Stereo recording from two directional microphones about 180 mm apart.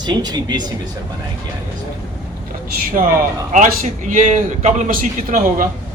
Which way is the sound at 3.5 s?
45° right (ahead or behind).